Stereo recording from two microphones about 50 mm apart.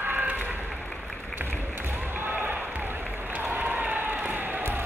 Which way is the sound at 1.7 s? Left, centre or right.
Right.